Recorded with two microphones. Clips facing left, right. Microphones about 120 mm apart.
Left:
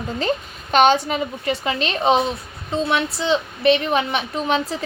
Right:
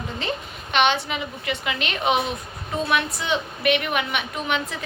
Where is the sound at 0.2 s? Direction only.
40° left (ahead or behind).